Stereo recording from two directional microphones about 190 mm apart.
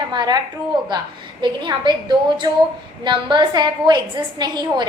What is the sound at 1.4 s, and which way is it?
A woman's voice, 25° right (ahead or behind).